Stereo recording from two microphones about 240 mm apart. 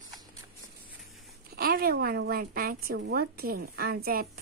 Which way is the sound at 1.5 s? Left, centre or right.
Right.